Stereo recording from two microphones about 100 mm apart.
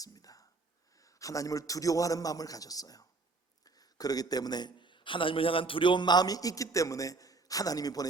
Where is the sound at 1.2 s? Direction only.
35° left (ahead or behind).